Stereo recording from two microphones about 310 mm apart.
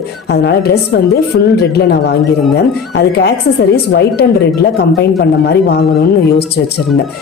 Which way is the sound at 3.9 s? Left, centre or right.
Left.